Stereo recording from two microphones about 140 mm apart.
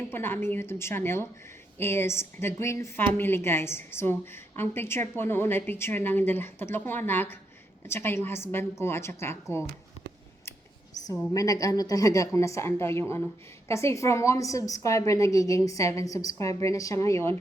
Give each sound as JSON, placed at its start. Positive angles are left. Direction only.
{"t": 0.1, "sound": "a woman's voice", "side_deg": 15}
{"t": 11.3, "sound": "a woman's voice", "side_deg": 25}